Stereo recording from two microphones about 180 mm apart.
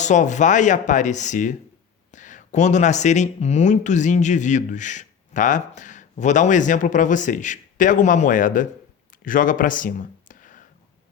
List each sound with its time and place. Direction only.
0.0 s speech: 40° left (ahead or behind)